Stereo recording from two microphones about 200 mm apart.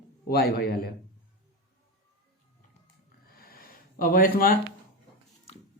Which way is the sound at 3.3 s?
50° left (ahead or behind).